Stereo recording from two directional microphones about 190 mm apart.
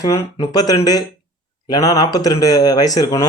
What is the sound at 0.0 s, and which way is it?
Speech, 20° left (ahead or behind).